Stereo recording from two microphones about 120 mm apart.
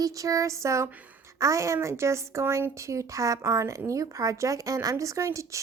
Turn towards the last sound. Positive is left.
turn(degrees=-25)  # may be behind; listen again after turning